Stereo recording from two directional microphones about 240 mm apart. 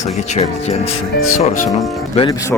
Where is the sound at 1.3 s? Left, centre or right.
Left.